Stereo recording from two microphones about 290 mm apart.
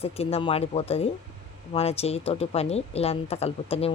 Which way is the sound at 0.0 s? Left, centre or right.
Left.